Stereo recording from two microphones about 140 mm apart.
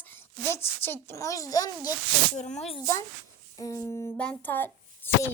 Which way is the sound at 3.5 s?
25° left (ahead or behind).